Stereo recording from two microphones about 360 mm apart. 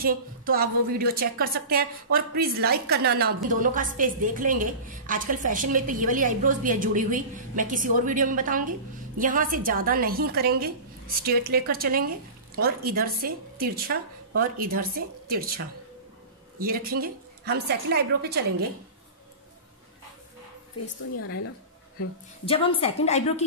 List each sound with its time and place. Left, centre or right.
0.0 s a woman's voice: right
20.8 s a woman's voice: left
22.4 s a woman's voice: centre